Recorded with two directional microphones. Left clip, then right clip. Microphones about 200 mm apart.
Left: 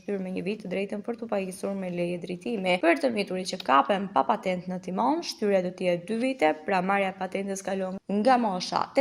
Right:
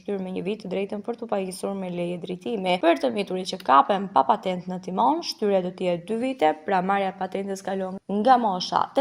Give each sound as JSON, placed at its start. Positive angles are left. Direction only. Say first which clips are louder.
{"t": 0.7, "sound": "speech", "louder": "right 3 dB", "side_deg": -40}